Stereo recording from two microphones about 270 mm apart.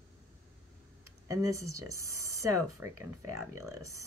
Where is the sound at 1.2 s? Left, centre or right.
Centre.